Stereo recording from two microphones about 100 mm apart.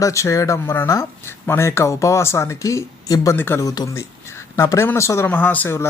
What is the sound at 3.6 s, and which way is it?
Speech, 40° left (ahead or behind).